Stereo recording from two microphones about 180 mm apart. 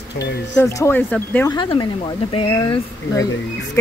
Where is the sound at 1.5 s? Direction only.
25° left (ahead or behind).